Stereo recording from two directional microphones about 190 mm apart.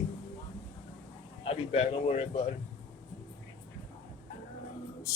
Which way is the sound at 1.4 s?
30° left (ahead or behind).